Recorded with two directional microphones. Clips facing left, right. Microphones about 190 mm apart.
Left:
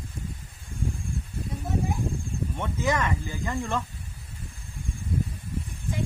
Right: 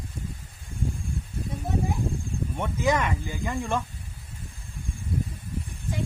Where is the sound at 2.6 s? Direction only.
15° right (ahead or behind).